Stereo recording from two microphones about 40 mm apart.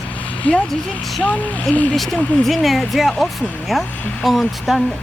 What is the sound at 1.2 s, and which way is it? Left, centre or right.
Speech, left.